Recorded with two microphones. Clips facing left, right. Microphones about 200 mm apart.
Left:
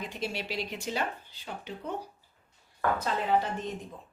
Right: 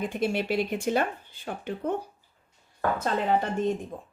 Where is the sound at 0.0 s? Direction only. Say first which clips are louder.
Right 8 dB; 55° right (ahead or behind).